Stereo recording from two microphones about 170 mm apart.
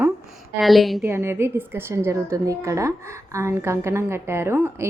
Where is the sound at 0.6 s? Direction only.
Centre (ahead or behind).